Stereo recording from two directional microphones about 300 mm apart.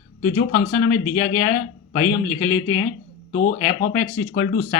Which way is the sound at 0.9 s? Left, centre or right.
Left.